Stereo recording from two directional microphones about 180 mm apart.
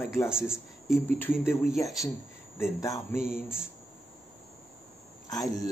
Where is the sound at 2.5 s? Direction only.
15° left (ahead or behind).